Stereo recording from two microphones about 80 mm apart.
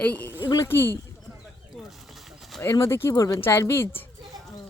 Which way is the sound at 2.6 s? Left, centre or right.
Left.